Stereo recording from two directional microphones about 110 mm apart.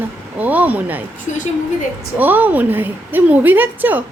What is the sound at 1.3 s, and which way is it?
Speech, 90° left.